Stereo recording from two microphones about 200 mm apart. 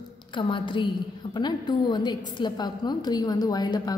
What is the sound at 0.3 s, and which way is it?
A woman's voice, 25° left (ahead or behind).